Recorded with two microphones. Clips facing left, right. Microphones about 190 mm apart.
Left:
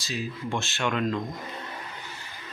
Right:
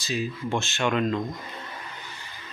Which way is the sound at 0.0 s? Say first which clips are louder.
Right 3 dB; centre (ahead or behind).